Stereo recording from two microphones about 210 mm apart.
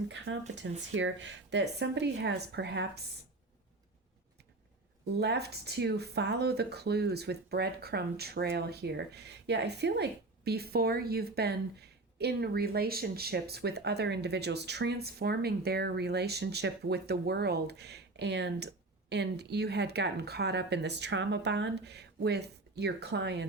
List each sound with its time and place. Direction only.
0.1 s speech: 55° right (ahead or behind)
5.2 s speech: 50° right (ahead or behind)